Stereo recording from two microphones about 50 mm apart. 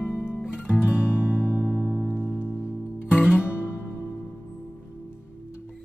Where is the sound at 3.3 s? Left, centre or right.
Left.